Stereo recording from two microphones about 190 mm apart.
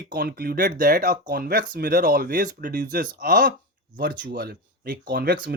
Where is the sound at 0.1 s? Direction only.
55° right (ahead or behind).